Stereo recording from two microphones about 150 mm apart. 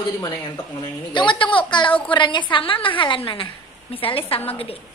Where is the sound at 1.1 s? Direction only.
30° left (ahead or behind).